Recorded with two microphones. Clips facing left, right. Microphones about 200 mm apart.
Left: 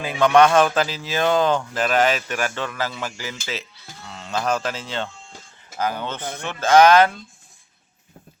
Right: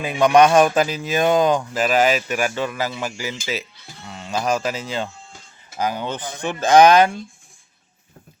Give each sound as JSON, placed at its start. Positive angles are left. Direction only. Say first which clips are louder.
{"t": 0.0, "sound": "speech", "louder": "right 1 dB", "side_deg": -20}